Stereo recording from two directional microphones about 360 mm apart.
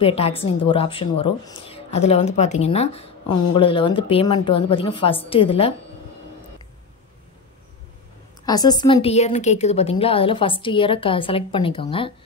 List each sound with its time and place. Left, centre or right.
0.0 s a woman's voice: centre
8.5 s a woman's voice: centre